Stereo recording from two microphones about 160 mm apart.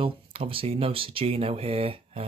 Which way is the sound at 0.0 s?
35° right (ahead or behind).